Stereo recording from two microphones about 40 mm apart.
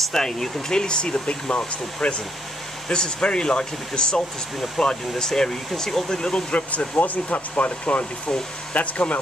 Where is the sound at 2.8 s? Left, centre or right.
Left.